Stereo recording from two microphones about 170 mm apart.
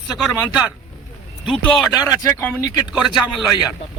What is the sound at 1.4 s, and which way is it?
Speech, 5° left (ahead or behind).